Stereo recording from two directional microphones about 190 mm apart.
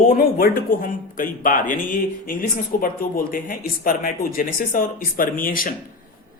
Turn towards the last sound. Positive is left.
turn(degrees=45)  # may be behind; listen again after turning